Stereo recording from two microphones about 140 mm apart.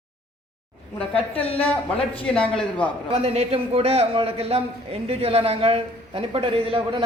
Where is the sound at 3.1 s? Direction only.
45° right (ahead or behind).